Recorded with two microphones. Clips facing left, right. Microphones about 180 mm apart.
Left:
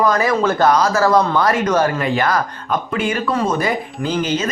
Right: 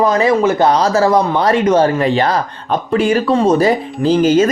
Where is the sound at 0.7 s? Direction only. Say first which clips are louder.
Right 2 dB; 35° right (ahead or behind).